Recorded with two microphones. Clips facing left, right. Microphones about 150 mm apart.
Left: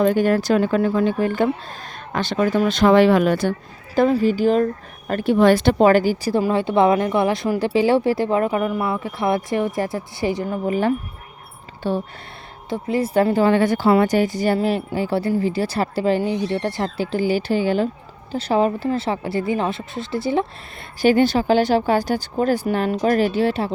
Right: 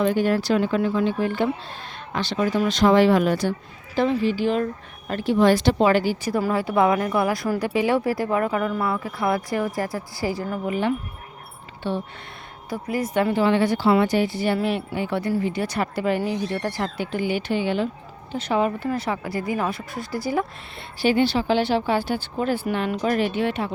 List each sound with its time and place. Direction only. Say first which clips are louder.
0.0 s speech: left 4 dB; 50° left (ahead or behind)
3.9 s speech: left 4 dB; 45° left (ahead or behind)
6.3 s speech: left 3 dB; 25° left (ahead or behind)
10.7 s speech: left 4 dB; 45° left (ahead or behind)
12.7 s speech: left 4 dB; 25° left (ahead or behind)
21.0 s speech: left 4 dB; 45° left (ahead or behind)